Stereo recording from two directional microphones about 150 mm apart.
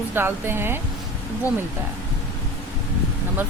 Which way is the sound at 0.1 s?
15° right (ahead or behind).